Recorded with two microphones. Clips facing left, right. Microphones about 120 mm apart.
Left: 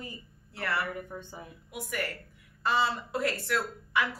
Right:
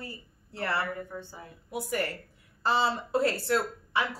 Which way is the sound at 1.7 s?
35° right (ahead or behind).